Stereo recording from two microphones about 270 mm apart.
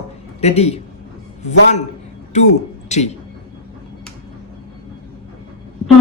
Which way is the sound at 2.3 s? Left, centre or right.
Left.